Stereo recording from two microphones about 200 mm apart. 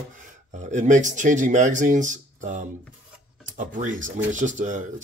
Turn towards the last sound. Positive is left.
turn(degrees=-40)  # may be behind; listen again after turning